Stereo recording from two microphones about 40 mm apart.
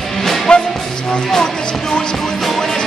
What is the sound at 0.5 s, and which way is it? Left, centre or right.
Music, left.